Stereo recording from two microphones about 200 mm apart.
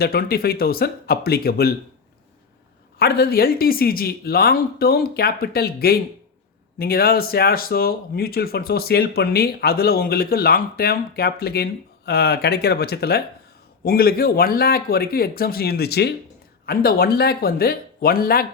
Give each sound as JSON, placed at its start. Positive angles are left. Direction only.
{"t": 0.0, "sound": "speech", "side_deg": 50}
{"t": 3.0, "sound": "speech", "side_deg": 50}